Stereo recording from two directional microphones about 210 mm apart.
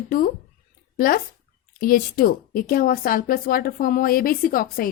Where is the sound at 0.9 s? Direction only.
45° left (ahead or behind).